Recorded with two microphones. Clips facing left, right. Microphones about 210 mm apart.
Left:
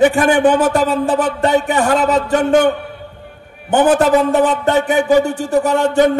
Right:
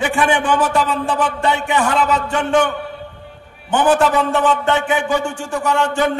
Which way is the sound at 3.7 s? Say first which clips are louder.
Left 3 dB; 40° left (ahead or behind).